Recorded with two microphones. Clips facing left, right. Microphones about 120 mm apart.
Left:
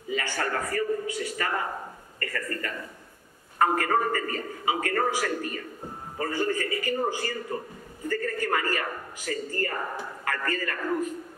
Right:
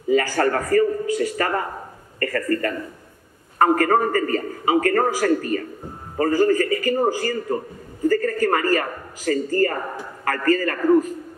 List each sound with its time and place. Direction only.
0.1 s a man's voice: 45° right (ahead or behind)